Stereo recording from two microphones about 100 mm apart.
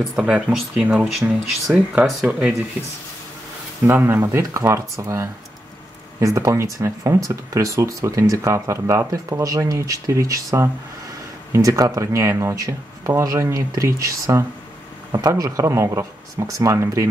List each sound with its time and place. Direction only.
0.2 s speech: 5° right (ahead or behind)
3.8 s speech: 20° right (ahead or behind)